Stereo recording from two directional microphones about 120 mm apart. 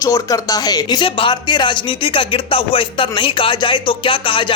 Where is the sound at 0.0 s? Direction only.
30° left (ahead or behind).